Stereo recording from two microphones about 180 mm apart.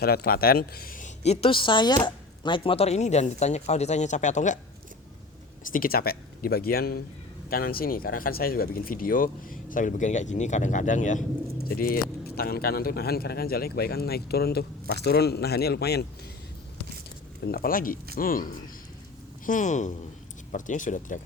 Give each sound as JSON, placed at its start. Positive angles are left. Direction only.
{"t": 0.0, "sound": "speech", "side_deg": 60}
{"t": 5.7, "sound": "speech", "side_deg": 55}
{"t": 11.7, "sound": "speech", "side_deg": 55}
{"t": 17.4, "sound": "speech", "side_deg": 55}